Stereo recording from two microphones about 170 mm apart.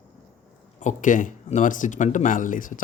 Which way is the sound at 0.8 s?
50° left (ahead or behind).